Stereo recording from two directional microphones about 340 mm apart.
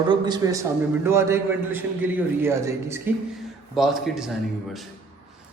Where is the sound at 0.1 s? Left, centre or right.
Centre.